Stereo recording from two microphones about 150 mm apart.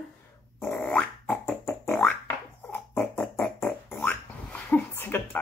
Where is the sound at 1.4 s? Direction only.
15° left (ahead or behind).